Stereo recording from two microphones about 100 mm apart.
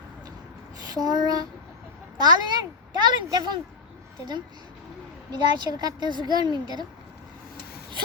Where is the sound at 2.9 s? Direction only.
45° right (ahead or behind).